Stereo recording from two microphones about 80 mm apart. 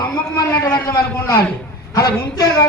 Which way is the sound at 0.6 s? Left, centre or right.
Left.